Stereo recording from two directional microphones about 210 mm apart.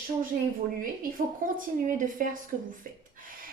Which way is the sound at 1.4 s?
40° right (ahead or behind).